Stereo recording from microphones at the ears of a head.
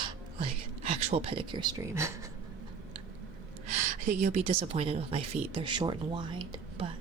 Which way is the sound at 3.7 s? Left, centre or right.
Right.